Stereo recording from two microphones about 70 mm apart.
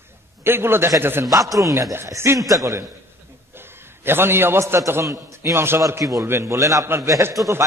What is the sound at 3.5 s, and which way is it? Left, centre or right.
A man's voice, right.